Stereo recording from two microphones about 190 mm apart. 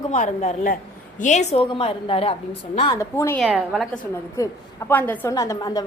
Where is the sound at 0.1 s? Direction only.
40° left (ahead or behind).